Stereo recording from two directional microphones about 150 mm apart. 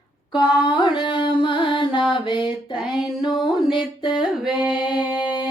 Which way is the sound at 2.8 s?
5° right (ahead or behind).